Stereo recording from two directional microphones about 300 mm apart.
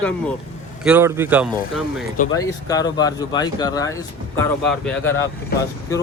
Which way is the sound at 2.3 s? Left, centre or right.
Centre.